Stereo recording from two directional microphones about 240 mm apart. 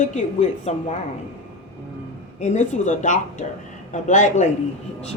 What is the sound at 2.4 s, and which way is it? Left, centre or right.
A man's voice, left.